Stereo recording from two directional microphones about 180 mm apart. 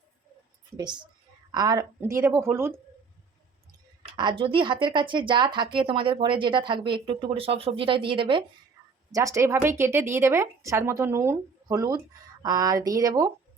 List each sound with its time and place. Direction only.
0.8 s speech: 25° right (ahead or behind)
4.2 s speech: 25° right (ahead or behind)
9.1 s speech: 15° right (ahead or behind)